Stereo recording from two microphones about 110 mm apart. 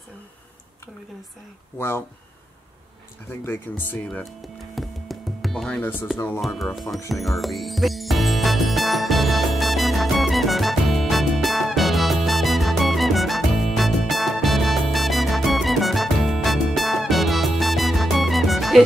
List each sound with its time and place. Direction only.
1.8 s speech: 20° left (ahead or behind)
3.4 s speech: 15° left (ahead or behind)
4.7 s music: centre (ahead or behind)
5.7 s speech: 15° left (ahead or behind)
6.4 s speech: centre (ahead or behind)
7.1 s music: centre (ahead or behind)